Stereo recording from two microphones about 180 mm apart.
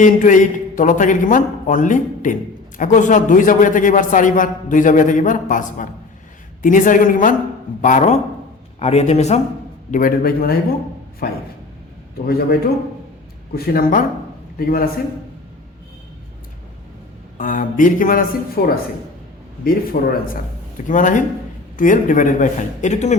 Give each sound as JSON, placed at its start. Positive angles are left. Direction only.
{"t": 0.0, "sound": "a man's voice", "side_deg": 45}
{"t": 9.9, "sound": "a man's voice", "side_deg": 50}
{"t": 17.3, "sound": "a man's voice", "side_deg": 50}